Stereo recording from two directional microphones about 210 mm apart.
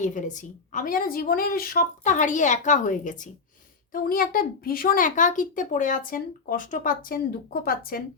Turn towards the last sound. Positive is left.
turn(degrees=45)  # may be behind; listen again after turning